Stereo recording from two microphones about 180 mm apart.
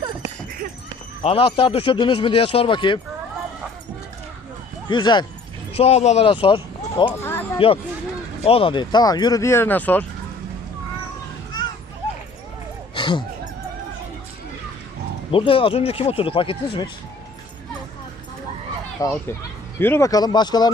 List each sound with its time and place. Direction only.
1.2 s speech: 30° left (ahead or behind)
4.9 s speech: 25° left (ahead or behind)
5.7 s speech: 35° left (ahead or behind)
7.3 s a sound: 10° left (ahead or behind)
8.4 s speech: 30° left (ahead or behind); by 10.1 s 10° left (ahead or behind)
12.9 s a sound: 25° left (ahead or behind)
15.3 s speech: 30° left (ahead or behind)
19.0 s speech: 20° left (ahead or behind)